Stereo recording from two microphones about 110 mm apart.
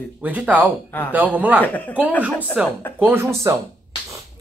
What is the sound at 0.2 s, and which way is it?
Speech, 15° right (ahead or behind).